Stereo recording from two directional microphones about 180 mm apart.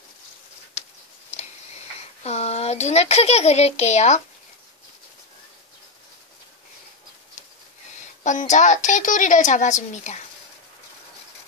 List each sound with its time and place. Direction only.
2.2 s speech: 35° left (ahead or behind)
8.2 s a woman's voice: 45° left (ahead or behind)